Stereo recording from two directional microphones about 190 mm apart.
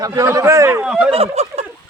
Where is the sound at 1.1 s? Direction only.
35° right (ahead or behind).